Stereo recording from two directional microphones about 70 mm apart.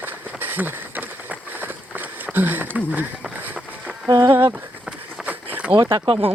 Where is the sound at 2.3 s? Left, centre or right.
Right.